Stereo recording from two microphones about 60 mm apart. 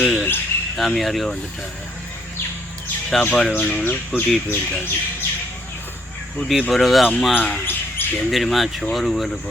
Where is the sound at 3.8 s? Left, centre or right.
Left.